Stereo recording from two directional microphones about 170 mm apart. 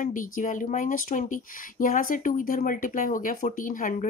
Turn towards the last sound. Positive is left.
turn(degrees=50)  # may be behind; listen again after turning